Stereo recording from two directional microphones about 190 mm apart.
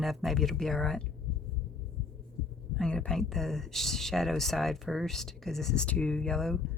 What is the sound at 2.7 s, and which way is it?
Speech, 5° left (ahead or behind).